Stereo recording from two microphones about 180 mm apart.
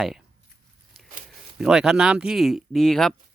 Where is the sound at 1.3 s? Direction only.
Centre (ahead or behind).